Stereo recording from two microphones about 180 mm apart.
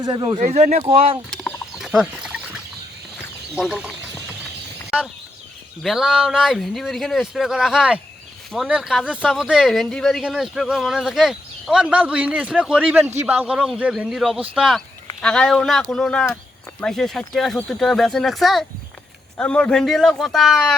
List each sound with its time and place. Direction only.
0.0 s speech: 25° right (ahead or behind)
0.3 s speech: 40° right (ahead or behind)
1.3 s a sound: centre (ahead or behind)
3.5 s speech: 5° right (ahead or behind)
5.8 s speech: centre (ahead or behind)